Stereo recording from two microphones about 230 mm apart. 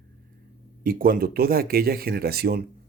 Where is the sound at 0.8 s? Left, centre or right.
Right.